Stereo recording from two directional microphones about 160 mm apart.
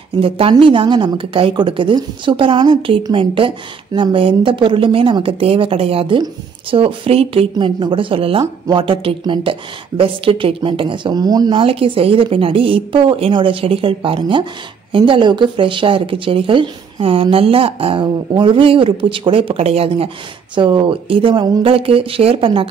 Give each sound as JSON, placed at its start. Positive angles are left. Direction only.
{"t": 0.2, "sound": "speech", "side_deg": -35}